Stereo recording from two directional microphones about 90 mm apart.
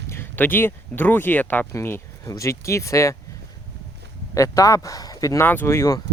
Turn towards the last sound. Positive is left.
turn(degrees=35)  # may be behind; listen again after turning